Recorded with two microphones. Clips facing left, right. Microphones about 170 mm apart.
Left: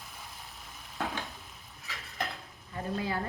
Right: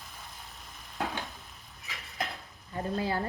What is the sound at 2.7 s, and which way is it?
Speech, 35° right (ahead or behind).